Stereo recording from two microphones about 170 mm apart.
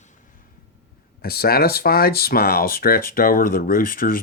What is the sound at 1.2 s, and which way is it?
Speech, 65° left (ahead or behind).